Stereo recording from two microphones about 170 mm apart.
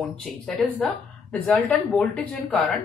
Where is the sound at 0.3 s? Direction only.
Centre (ahead or behind).